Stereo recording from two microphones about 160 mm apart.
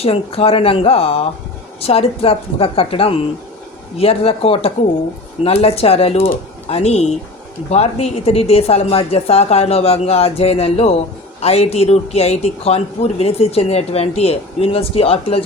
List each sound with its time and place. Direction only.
0.0 s speech: 40° left (ahead or behind)